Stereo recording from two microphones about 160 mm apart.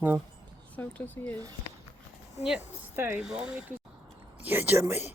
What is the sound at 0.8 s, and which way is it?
Speech, 10° left (ahead or behind).